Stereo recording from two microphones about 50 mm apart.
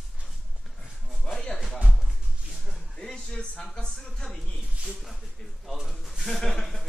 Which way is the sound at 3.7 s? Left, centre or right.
Centre.